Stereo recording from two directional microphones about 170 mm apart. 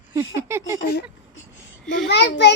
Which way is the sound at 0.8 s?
65° left (ahead or behind).